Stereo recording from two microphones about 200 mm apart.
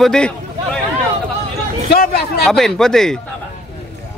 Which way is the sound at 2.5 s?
Centre (ahead or behind).